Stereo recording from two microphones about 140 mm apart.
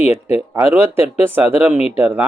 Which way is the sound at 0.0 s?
50° left (ahead or behind).